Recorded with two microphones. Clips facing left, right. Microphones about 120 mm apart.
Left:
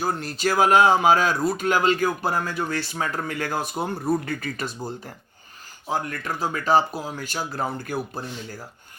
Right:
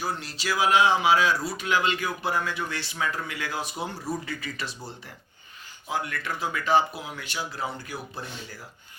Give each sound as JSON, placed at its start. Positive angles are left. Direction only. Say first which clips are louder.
{"t": 0.0, "sound": "speech", "louder": "left 7 dB", "side_deg": 50}